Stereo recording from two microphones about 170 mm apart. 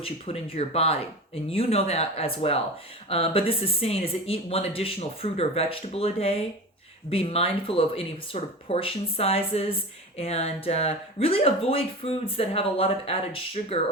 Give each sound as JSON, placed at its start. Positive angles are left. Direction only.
{"t": 0.0, "sound": "speech", "side_deg": 35}